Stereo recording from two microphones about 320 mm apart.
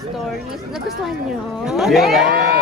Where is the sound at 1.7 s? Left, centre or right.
Centre.